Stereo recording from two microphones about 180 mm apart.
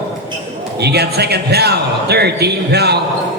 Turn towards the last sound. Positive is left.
turn(degrees=-65)  # may be behind; listen again after turning